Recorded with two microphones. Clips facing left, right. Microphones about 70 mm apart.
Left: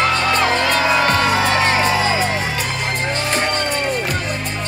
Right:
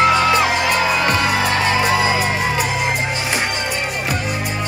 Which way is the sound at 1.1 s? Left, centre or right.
Left.